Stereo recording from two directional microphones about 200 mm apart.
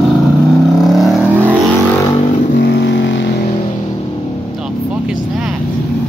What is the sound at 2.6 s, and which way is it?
Vehicle, 60° left (ahead or behind).